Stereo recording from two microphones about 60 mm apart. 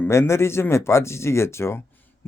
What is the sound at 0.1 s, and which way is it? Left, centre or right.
Speech, left.